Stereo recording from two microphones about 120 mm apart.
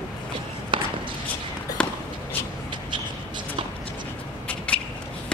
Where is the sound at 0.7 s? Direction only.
45° right (ahead or behind).